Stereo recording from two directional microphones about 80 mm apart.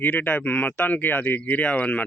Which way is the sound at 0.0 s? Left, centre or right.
Left.